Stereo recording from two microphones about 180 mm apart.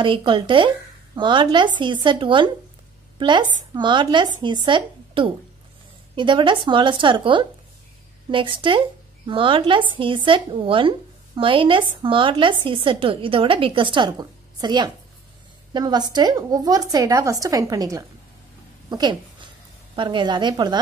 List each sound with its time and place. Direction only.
0.0 s speech: 25° right (ahead or behind)
18.9 s a sound: 25° right (ahead or behind)
20.0 s speech: 25° right (ahead or behind)